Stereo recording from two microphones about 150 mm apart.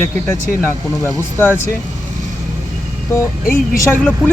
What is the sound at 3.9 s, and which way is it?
Speech, 10° left (ahead or behind).